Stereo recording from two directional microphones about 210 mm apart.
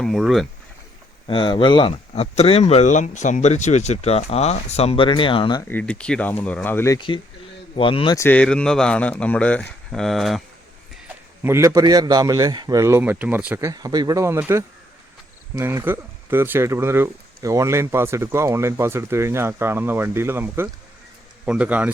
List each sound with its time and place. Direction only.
0.0 s speech: centre (ahead or behind)
1.3 s speech: 20° left (ahead or behind)
5.6 s a man's voice: 5° left (ahead or behind)
11.4 s speech: 15° right (ahead or behind)